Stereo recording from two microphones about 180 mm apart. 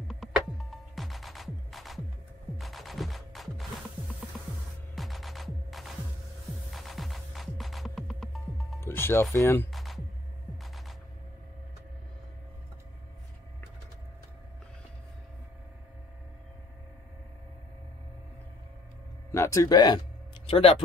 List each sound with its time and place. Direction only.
0.1 s music: centre (ahead or behind)
8.8 s speech: 15° left (ahead or behind)
9.7 s music: centre (ahead or behind)
19.3 s speech: 15° left (ahead or behind)
20.4 s speech: 35° left (ahead or behind)